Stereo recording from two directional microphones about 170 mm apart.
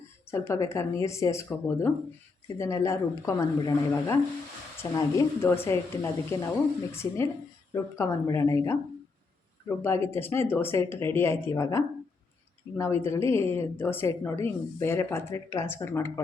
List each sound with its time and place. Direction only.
0.3 s a woman's voice: 15° left (ahead or behind)